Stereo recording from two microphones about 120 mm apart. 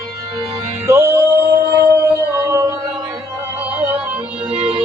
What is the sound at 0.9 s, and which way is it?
Music, 25° right (ahead or behind).